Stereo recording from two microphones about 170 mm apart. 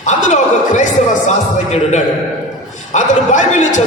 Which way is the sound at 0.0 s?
45° left (ahead or behind).